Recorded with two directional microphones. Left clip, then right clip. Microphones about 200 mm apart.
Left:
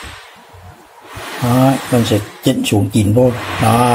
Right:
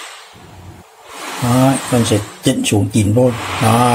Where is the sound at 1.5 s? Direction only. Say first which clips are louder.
Left 1 dB; centre (ahead or behind).